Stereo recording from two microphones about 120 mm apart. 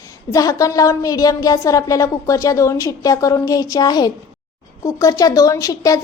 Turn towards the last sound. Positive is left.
turn(degrees=30)  # may be behind; listen again after turning